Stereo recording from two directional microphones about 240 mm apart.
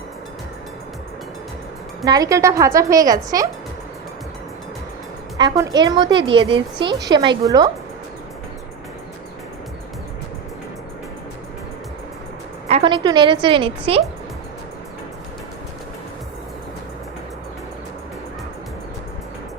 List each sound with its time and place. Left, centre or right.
2.0 s a woman's voice: centre
5.4 s a woman's voice: centre
12.6 s a woman's voice: right